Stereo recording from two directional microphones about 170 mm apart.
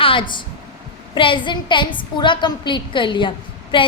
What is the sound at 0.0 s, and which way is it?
A woman's voice, 30° left (ahead or behind).